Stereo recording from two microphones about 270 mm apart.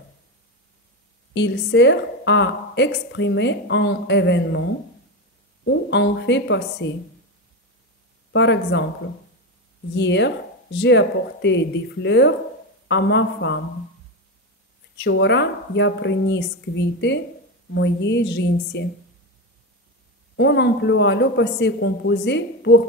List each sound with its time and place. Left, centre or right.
1.3 s a woman's voice: left
5.7 s a woman's voice: left
8.3 s a woman's voice: left
9.9 s a woman's voice: left
15.0 s a woman's voice: left
20.3 s a woman's voice: left